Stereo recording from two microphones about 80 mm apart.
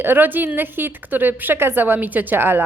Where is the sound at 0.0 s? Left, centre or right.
Right.